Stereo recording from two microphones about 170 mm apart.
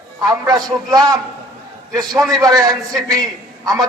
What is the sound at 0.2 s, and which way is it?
A man's voice, 20° right (ahead or behind).